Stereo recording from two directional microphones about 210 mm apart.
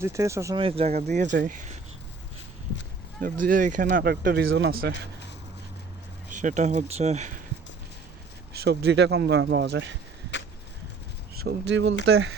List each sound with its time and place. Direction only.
0.0 s speech: 15° right (ahead or behind)
0.6 s speech: 30° right (ahead or behind)
3.2 s speech: 40° right (ahead or behind)
4.4 s speech: 60° right (ahead or behind)
6.3 s speech: 35° right (ahead or behind)
8.6 s speech: 50° right (ahead or behind)
11.3 s speech: 55° right (ahead or behind)